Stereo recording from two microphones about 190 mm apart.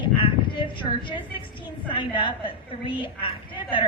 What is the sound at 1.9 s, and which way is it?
A woman's voice, 25° left (ahead or behind).